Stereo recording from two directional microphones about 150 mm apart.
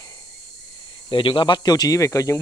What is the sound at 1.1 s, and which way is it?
Speech, 35° left (ahead or behind).